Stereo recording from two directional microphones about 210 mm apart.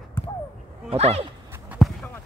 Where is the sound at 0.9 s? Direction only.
30° right (ahead or behind).